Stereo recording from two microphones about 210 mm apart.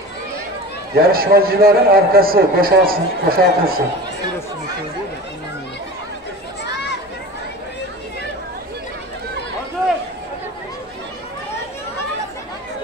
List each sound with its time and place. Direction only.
0.9 s a man's voice: 45° right (ahead or behind)